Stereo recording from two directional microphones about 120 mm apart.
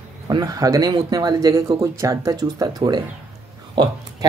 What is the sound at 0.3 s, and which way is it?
A woman's voice, 35° right (ahead or behind).